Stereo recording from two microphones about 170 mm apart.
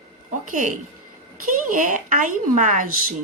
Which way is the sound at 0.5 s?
50° right (ahead or behind).